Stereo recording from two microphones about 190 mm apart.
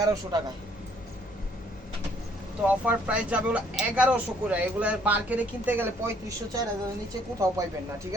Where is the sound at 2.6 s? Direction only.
5° right (ahead or behind).